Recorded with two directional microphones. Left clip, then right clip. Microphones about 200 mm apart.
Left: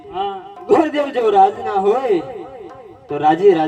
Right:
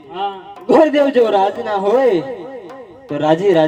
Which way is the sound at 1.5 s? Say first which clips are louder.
Right 1 dB; 45° right (ahead or behind).